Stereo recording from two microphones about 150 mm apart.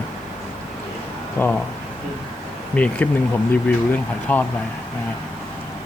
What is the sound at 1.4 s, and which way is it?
Speech, 15° left (ahead or behind).